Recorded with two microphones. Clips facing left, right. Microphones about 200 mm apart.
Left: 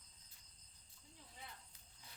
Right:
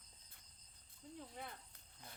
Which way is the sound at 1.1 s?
55° right (ahead or behind).